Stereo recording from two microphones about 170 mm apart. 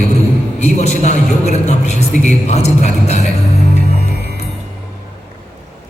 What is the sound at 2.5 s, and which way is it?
Music, 40° left (ahead or behind).